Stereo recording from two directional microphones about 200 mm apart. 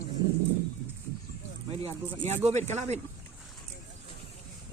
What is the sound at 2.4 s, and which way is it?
Speech, 35° right (ahead or behind).